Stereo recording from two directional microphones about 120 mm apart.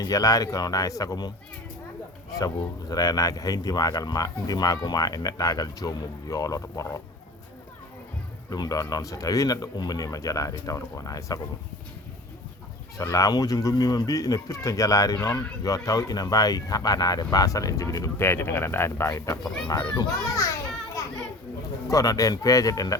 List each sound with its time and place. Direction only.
0.0 s speech: 30° left (ahead or behind)
2.4 s speech: 30° left (ahead or behind)
8.4 s speech: 35° left (ahead or behind)
13.0 s speech: 30° left (ahead or behind)
19.6 s speech: 35° left (ahead or behind)
21.0 s children playing: 25° left (ahead or behind)
21.8 s speech: 30° left (ahead or behind)